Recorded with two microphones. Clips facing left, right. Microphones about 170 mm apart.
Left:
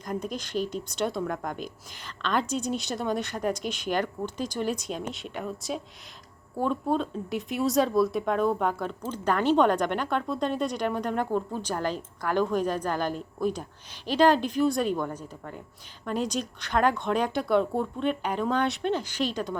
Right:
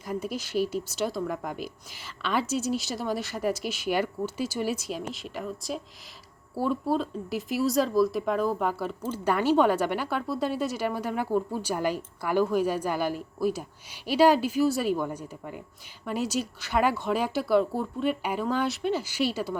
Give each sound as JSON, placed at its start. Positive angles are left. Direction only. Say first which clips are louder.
{"t": 0.0, "sound": "speech", "louder": "even", "side_deg": -5}